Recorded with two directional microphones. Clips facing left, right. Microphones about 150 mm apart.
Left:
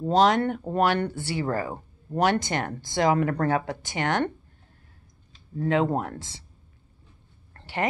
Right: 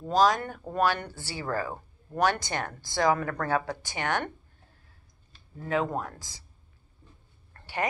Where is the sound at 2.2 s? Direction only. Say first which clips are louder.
Left 3 dB; 20° left (ahead or behind).